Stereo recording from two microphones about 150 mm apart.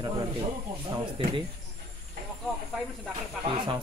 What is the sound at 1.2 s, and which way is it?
Speech, 35° right (ahead or behind).